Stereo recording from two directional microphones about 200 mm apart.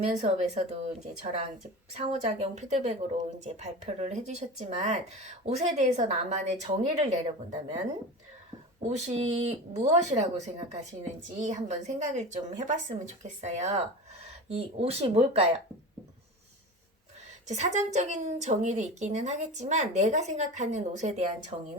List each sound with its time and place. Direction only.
0.2 s speech: 35° right (ahead or behind)
8.9 s speech: 35° right (ahead or behind)
17.5 s speech: 35° right (ahead or behind)